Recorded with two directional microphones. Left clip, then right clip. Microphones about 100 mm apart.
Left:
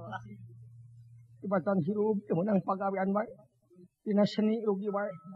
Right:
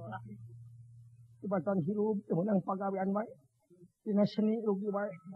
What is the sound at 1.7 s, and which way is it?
A man's voice, 35° left (ahead or behind).